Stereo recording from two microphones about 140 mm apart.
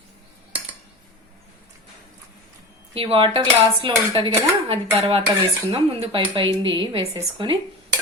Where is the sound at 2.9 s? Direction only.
40° right (ahead or behind).